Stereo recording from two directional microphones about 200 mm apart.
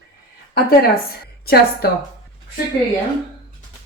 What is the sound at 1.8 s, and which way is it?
Speech, 50° left (ahead or behind).